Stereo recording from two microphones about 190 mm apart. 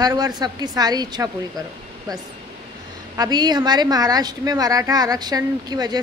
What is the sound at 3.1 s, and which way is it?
A woman's voice, 20° right (ahead or behind).